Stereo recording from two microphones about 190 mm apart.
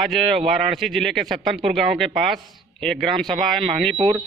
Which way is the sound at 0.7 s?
Centre (ahead or behind).